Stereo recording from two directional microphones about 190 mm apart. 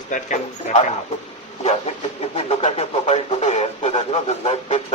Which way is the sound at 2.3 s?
35° left (ahead or behind).